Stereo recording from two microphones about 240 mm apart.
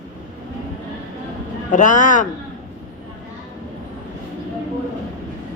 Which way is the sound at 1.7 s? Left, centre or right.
Left.